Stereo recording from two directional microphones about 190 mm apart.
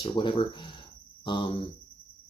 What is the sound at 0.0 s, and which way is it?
Speech, 25° left (ahead or behind).